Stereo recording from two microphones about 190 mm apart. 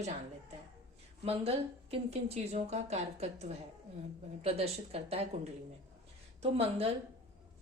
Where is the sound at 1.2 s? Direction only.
30° right (ahead or behind).